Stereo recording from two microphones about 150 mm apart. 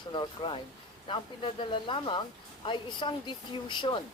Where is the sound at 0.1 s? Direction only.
35° left (ahead or behind).